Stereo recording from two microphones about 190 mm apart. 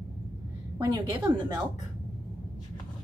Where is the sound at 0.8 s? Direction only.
20° right (ahead or behind).